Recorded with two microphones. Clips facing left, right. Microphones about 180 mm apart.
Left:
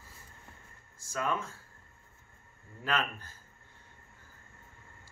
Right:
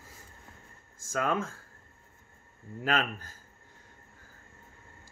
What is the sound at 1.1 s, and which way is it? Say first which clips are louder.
Speech: right 4 dB; 50° right (ahead or behind).